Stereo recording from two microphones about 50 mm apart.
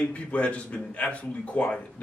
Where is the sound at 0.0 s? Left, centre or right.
Left.